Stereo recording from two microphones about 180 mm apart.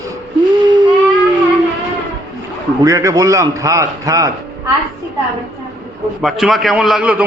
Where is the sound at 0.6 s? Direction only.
25° right (ahead or behind).